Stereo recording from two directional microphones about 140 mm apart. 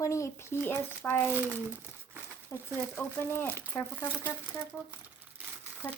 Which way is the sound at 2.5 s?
25° left (ahead or behind).